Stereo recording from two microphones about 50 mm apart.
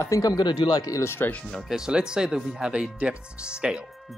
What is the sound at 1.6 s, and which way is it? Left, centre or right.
Speech, centre.